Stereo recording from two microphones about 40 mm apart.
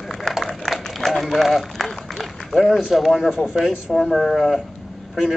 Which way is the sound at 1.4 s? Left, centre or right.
Centre.